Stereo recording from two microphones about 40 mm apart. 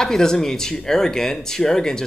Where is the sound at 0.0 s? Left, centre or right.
Centre.